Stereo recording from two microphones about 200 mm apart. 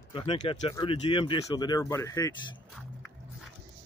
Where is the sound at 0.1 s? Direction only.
30° left (ahead or behind).